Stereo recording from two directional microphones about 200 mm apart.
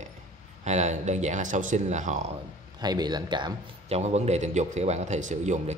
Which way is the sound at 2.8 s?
20° right (ahead or behind).